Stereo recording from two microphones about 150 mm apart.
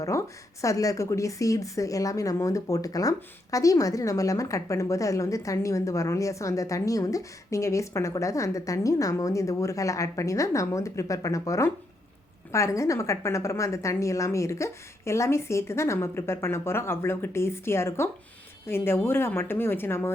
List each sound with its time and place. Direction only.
0.0 s a woman's voice: 20° left (ahead or behind)